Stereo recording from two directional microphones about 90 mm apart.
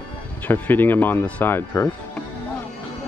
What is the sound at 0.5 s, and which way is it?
Speech, 20° left (ahead or behind).